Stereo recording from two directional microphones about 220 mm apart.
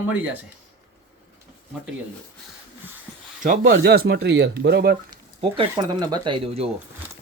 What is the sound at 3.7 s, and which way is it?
Speech, 45° right (ahead or behind).